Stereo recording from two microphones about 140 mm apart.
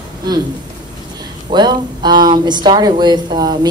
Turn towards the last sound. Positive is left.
turn(degrees=-30)  # may be behind; listen again after turning